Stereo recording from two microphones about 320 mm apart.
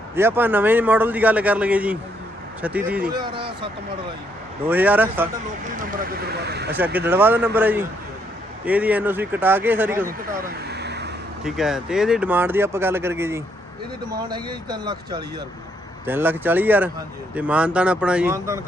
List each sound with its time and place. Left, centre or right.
0.2 s a man's voice: centre
5.7 s speech: right
6.7 s a man's voice: centre
10.7 s vehicle: right
11.4 s a man's voice: centre